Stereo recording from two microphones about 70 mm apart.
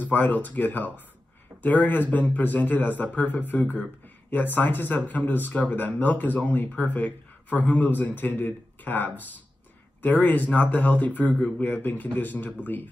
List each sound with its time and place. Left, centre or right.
0.0 s speech: left
11.3 s speech: centre
11.6 s speech: left